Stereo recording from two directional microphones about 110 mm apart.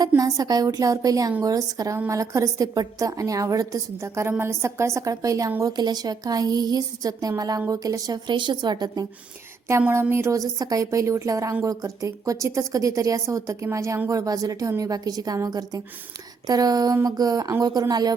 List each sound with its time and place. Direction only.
0.2 s a woman's voice: 35° right (ahead or behind)
9.8 s a woman's voice: 20° right (ahead or behind); by 18.1 s 35° right (ahead or behind)